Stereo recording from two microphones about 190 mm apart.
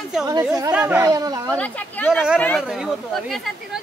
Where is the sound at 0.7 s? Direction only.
10° right (ahead or behind).